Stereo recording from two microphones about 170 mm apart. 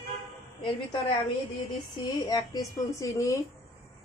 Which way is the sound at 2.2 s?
20° left (ahead or behind).